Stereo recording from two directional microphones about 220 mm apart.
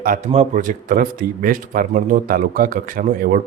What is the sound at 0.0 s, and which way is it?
A man's voice, 35° right (ahead or behind).